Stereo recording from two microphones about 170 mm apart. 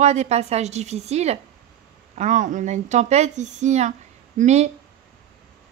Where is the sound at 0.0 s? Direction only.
40° right (ahead or behind).